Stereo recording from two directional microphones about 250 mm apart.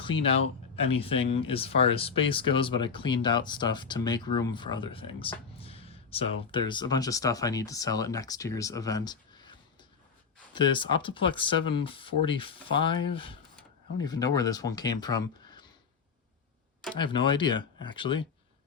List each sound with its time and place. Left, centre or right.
0.0 s speech: left
16.9 s speech: centre